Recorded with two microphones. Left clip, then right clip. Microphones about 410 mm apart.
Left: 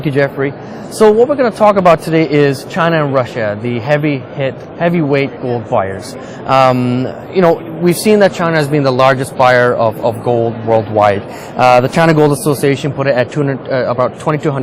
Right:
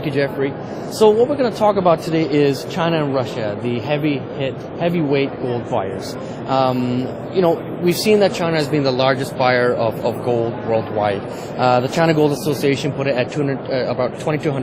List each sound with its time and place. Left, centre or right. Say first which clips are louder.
0.0 s a man's voice: left 6 dB; left